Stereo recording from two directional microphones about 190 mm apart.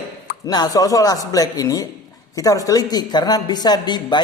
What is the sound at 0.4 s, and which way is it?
A man's voice, 20° left (ahead or behind).